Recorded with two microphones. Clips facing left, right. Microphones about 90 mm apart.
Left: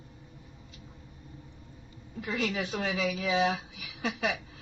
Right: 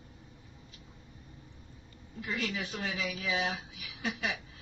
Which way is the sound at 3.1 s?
40° left (ahead or behind).